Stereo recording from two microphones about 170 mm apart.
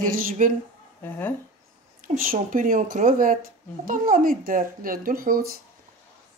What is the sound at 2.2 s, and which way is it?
Speech, 55° right (ahead or behind).